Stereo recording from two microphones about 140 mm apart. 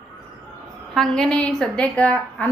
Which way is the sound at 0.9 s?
5° left (ahead or behind).